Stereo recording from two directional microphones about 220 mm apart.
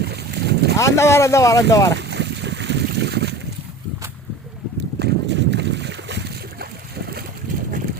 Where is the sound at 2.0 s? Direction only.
50° right (ahead or behind).